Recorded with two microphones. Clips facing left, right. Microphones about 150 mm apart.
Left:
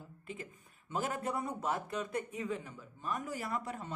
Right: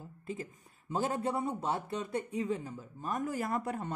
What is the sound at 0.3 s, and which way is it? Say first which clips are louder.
Speech: right 5 dB; 35° right (ahead or behind).